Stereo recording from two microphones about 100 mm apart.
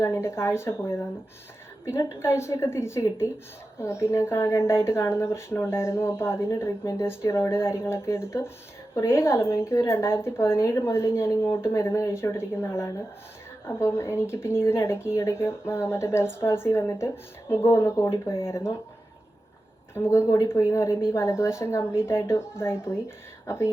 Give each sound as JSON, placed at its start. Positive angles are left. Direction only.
{"t": 0.0, "sound": "a woman's voice", "side_deg": 25}
{"t": 19.9, "sound": "a woman's voice", "side_deg": 25}